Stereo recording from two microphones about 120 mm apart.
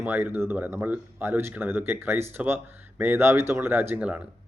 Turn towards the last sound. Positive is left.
turn(degrees=-10)  # may be behind; listen again after turning